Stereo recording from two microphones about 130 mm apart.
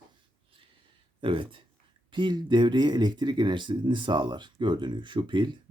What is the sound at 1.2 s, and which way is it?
Speech, 40° right (ahead or behind).